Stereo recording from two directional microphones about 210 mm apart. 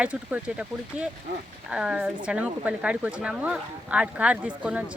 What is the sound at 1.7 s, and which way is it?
Speech, 5° right (ahead or behind).